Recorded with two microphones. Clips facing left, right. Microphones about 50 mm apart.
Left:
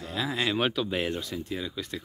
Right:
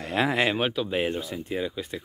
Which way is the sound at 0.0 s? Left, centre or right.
Right.